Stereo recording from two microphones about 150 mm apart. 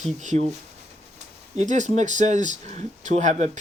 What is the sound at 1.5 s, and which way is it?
Speech, 55° right (ahead or behind).